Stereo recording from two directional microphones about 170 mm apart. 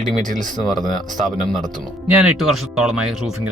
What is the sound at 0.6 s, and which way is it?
Speech, centre (ahead or behind).